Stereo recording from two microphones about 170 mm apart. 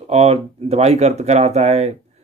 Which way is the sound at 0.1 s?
35° right (ahead or behind).